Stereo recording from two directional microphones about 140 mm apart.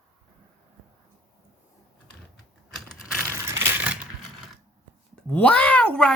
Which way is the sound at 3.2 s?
20° right (ahead or behind).